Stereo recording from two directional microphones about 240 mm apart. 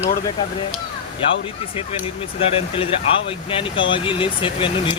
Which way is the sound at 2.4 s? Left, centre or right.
Left.